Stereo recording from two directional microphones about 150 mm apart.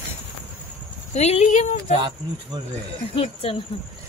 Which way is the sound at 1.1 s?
45° left (ahead or behind).